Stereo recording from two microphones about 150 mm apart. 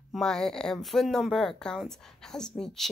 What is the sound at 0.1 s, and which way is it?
Speech, 5° left (ahead or behind).